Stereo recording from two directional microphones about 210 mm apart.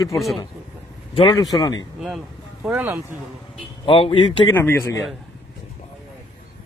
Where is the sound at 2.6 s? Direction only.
5° right (ahead or behind).